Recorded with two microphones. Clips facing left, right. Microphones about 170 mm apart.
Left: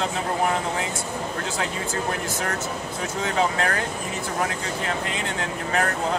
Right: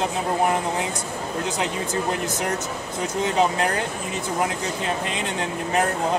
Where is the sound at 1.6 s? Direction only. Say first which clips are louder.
Right 1 dB; 20° right (ahead or behind).